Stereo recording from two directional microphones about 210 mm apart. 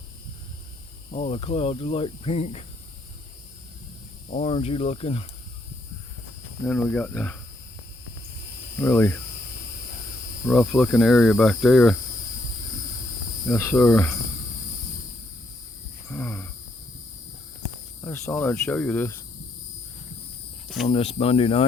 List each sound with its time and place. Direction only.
1.1 s speech: 30° left (ahead or behind)
4.3 s speech: 30° left (ahead or behind)
6.7 s speech: 5° left (ahead or behind)
8.8 s speech: 10° left (ahead or behind)
10.5 s cricket: centre (ahead or behind)
13.5 s speech: 10° left (ahead or behind)
16.0 s groan: 10° left (ahead or behind)
18.0 s speech: 10° left (ahead or behind)
20.8 s speech: 30° left (ahead or behind)